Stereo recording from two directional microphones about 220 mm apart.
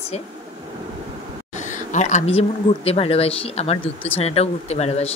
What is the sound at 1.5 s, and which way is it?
Speech, 35° left (ahead or behind).